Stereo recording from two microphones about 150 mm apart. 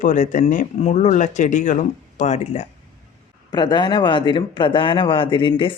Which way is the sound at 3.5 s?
30° left (ahead or behind).